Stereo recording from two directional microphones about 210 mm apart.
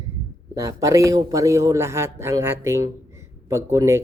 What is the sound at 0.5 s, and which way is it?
Speech, 15° right (ahead or behind).